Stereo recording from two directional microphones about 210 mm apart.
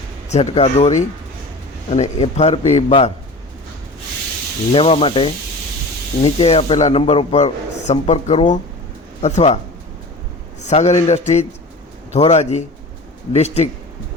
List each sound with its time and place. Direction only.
0.3 s a man's voice: 30° left (ahead or behind)
4.7 s a man's voice: 25° left (ahead or behind)
10.6 s a man's voice: 30° left (ahead or behind)